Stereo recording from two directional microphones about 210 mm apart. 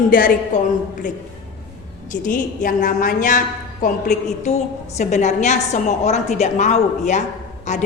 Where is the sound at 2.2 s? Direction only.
40° left (ahead or behind).